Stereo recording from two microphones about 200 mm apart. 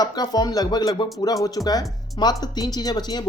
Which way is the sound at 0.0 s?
20° left (ahead or behind).